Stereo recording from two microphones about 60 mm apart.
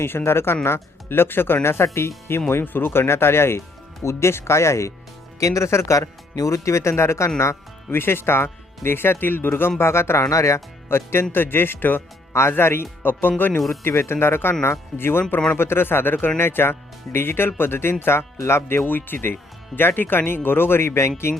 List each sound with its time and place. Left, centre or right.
0.0 s speech: left
10.2 s speech: left
13.7 s speech: left